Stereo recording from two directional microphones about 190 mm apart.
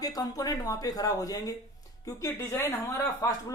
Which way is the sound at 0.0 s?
20° left (ahead or behind).